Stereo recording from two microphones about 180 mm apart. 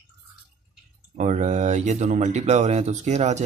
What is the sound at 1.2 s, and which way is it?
Speech, 40° right (ahead or behind).